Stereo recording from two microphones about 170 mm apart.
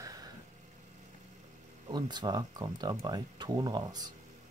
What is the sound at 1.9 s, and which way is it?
Speech, 25° right (ahead or behind).